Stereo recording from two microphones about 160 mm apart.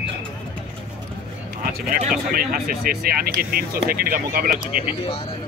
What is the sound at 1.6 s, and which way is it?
Speech, 65° right (ahead or behind).